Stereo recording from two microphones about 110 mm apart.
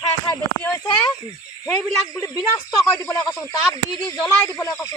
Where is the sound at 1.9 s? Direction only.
30° left (ahead or behind).